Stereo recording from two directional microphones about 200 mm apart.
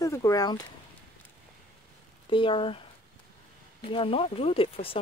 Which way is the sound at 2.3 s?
25° left (ahead or behind).